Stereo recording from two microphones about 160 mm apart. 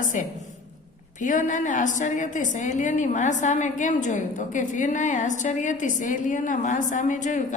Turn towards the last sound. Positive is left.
turn(degrees=50)  # may be behind; listen again after turning